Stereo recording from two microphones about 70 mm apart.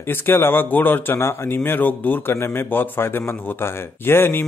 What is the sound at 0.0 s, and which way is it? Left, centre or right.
Speech, left.